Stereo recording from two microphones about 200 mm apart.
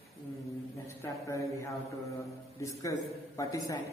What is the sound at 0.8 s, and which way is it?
Speech, 15° left (ahead or behind).